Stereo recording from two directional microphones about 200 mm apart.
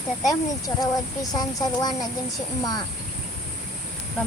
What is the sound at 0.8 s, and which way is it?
Speech, 20° left (ahead or behind).